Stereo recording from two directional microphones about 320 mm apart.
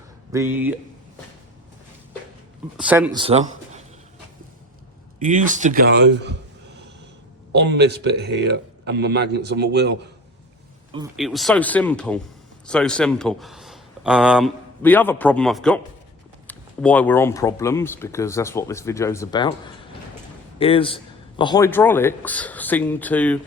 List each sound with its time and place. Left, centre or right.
0.3 s speech: centre
2.7 s speech: centre; by 3.8 s right
5.2 s speech: right
7.5 s speech: right
11.2 s a man's voice: centre
20.6 s a man's voice: centre